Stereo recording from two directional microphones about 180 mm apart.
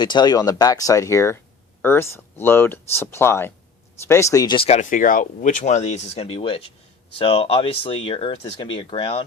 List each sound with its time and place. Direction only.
0.0 s speech: 25° left (ahead or behind)